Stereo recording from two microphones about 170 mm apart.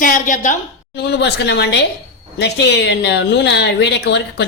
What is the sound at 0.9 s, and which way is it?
A woman's voice, 80° left.